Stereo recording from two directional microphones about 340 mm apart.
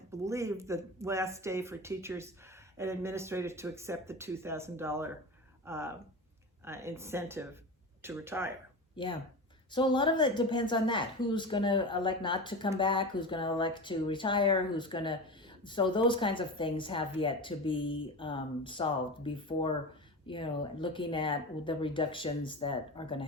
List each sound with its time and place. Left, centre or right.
0.1 s speech: centre
9.0 s speech: centre